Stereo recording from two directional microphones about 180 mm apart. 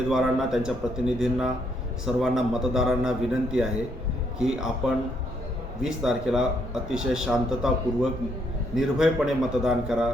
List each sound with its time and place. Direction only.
0.1 s a man's voice: centre (ahead or behind)
5.8 s a man's voice: 5° right (ahead or behind)